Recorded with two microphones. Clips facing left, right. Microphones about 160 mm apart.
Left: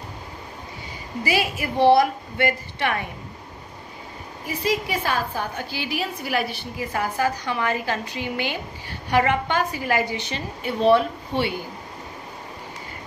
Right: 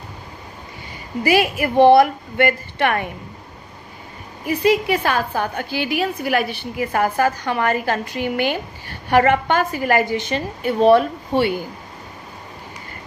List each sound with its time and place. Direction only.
1.2 s a woman's voice: 55° right (ahead or behind)
4.5 s a woman's voice: 65° right (ahead or behind); by 11.5 s 45° right (ahead or behind)